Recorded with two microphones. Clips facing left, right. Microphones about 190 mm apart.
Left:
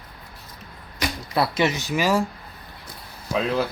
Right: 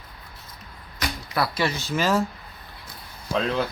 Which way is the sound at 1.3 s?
25° left (ahead or behind).